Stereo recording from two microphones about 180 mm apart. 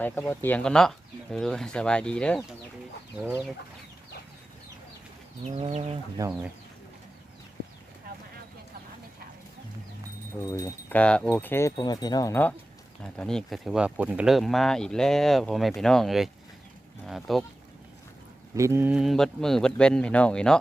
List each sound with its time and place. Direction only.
0.0 s speech: 10° left (ahead or behind)
5.7 s speech: 35° right (ahead or behind)
6.2 s speech: 20° right (ahead or behind)
10.4 s speech: 15° left (ahead or behind); by 17.4 s centre (ahead or behind)
18.5 s speech: 15° right (ahead or behind); by 20.6 s 5° left (ahead or behind)